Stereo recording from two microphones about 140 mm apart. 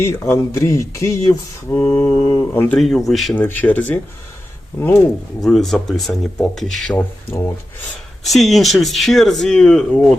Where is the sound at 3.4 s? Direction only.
10° left (ahead or behind).